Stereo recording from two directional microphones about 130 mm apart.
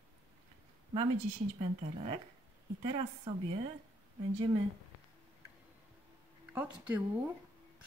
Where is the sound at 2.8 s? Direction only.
45° right (ahead or behind).